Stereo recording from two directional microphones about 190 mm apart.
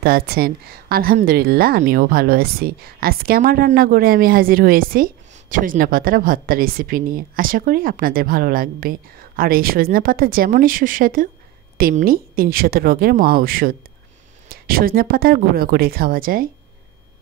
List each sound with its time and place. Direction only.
0.0 s a woman's voice: 55° right (ahead or behind)